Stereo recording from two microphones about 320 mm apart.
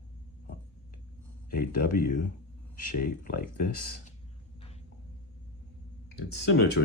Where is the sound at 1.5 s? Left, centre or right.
Left.